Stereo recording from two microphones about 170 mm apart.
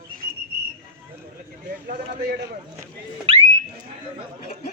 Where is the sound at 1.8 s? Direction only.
75° right (ahead or behind).